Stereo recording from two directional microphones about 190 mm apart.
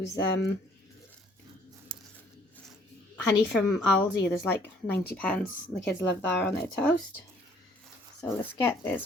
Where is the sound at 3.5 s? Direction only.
Centre (ahead or behind).